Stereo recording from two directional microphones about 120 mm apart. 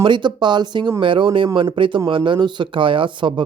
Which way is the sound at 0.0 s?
40° right (ahead or behind).